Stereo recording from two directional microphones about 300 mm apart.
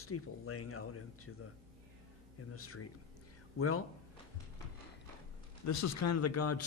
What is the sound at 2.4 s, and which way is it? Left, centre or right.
A man's voice, left.